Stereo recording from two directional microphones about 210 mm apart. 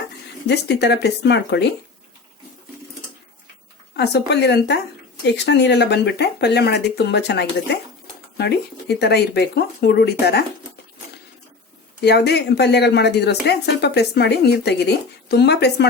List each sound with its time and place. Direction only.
0.4 s speech: 55° left (ahead or behind)
3.9 s speech: 50° left (ahead or behind)
12.0 s speech: 50° left (ahead or behind)